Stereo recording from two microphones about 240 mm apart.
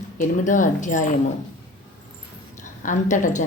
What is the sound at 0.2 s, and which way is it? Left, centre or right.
Speech, left.